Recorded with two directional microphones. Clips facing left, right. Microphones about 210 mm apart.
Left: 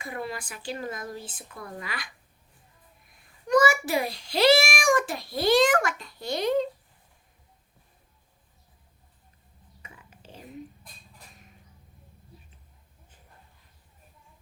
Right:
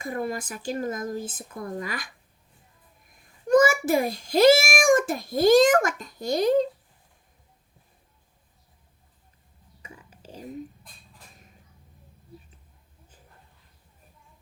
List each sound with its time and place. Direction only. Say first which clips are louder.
0.0 s a child's voice: right 5 dB; 45° right (ahead or behind)
3.4 s a child's voice: right 3 dB; 45° right (ahead or behind)
9.8 s whispering: right 4 dB; 35° right (ahead or behind)